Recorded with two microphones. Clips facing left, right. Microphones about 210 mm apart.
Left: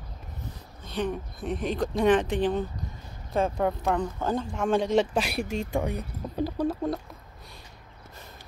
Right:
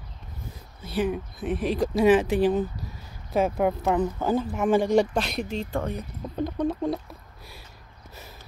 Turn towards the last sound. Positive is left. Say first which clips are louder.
# right 1 dB
turn(degrees=5)  # may be behind; listen again after turning